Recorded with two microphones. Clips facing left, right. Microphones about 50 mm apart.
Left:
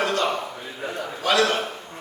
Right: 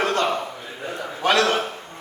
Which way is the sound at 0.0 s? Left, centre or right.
Right.